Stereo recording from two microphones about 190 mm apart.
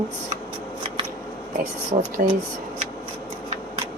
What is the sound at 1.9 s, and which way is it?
Speech, 35° right (ahead or behind).